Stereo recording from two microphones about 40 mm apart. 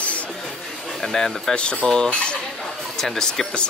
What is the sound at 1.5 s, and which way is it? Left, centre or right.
Speech, left.